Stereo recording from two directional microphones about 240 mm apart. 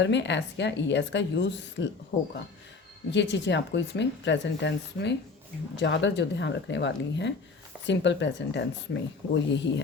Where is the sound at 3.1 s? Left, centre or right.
Left.